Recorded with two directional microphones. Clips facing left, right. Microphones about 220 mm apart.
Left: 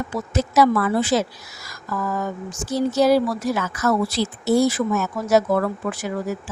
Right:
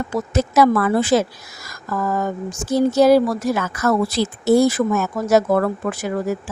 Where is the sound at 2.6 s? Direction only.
50° right (ahead or behind).